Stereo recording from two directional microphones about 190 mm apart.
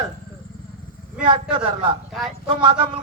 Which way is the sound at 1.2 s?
25° right (ahead or behind).